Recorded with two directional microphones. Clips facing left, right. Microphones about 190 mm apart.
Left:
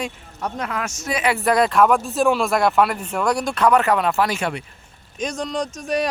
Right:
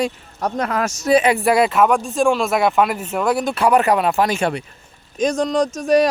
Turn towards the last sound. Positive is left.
turn(degrees=-40)  # may be behind; listen again after turning